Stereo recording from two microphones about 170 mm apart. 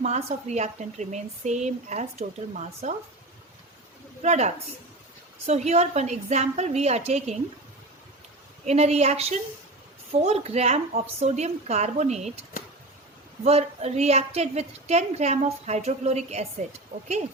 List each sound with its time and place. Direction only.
0.0 s speech: 40° right (ahead or behind)
4.2 s a woman's voice: 40° right (ahead or behind)
8.6 s a woman's voice: 40° right (ahead or behind)
13.4 s a woman's voice: 40° right (ahead or behind)